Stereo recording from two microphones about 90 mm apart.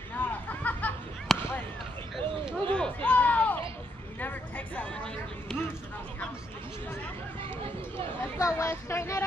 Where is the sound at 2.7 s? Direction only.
15° left (ahead or behind).